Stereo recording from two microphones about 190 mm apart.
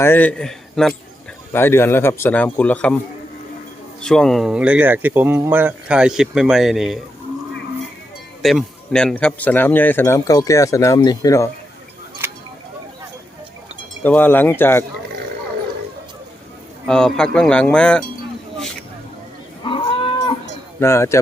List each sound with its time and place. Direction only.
0.0 s speech: 10° left (ahead or behind)
4.0 s speech: 5° left (ahead or behind)
8.4 s speech: centre (ahead or behind); by 11.5 s 15° left (ahead or behind)
12.2 s a sound: 10° right (ahead or behind)
14.0 s speech: 10° left (ahead or behind)
16.8 s speech: centre (ahead or behind)
19.6 s livestock: 25° left (ahead or behind)
20.7 s speech: 15° left (ahead or behind)